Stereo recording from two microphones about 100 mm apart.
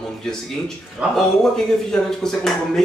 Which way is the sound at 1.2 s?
5° left (ahead or behind).